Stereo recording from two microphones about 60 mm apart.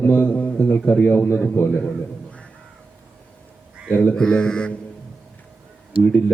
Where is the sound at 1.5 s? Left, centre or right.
Left.